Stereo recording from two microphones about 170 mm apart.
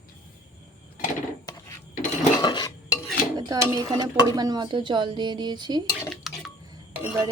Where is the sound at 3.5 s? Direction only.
20° right (ahead or behind).